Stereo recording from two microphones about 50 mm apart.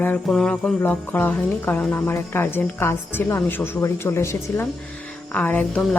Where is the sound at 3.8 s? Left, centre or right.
Left.